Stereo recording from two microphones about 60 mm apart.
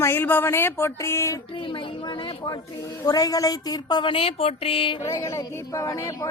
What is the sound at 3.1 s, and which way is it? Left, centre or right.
Speech, left.